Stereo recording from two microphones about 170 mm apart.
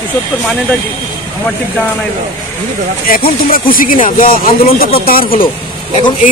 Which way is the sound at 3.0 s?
55° left (ahead or behind).